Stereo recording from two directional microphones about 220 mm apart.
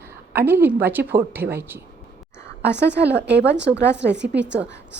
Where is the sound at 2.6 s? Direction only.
50° right (ahead or behind).